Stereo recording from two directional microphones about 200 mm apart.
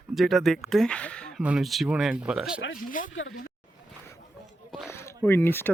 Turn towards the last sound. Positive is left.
turn(degrees=10)  # may be behind; listen again after turning